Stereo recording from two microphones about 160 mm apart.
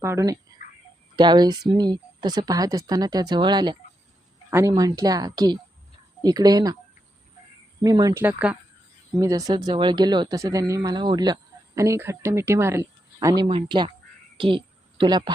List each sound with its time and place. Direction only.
0.0 s speech: 20° right (ahead or behind)
7.8 s speech: 25° right (ahead or behind)
8.2 s speech: 10° right (ahead or behind)
9.1 s speech: 20° right (ahead or behind)
14.3 s a sound: 30° right (ahead or behind)